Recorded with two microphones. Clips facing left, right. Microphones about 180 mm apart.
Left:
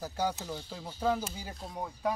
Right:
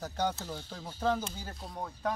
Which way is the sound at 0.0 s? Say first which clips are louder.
Even; 10° left (ahead or behind).